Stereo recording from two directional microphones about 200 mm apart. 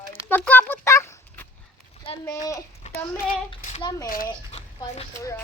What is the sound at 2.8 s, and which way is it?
Speech, 35° left (ahead or behind).